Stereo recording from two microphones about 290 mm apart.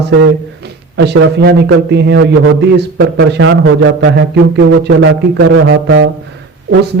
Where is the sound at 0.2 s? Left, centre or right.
Right.